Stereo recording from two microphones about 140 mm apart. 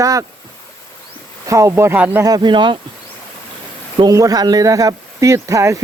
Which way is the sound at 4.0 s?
25° right (ahead or behind).